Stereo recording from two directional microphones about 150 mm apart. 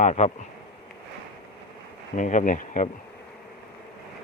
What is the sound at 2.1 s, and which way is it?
Speech, 55° left (ahead or behind).